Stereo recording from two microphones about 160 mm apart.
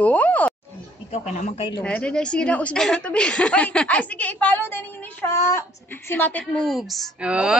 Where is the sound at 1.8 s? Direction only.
5° left (ahead or behind).